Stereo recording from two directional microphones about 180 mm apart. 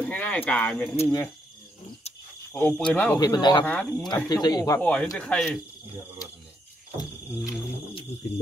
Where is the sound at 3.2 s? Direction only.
25° left (ahead or behind).